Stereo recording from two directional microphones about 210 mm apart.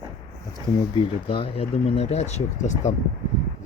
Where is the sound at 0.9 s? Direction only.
25° left (ahead or behind).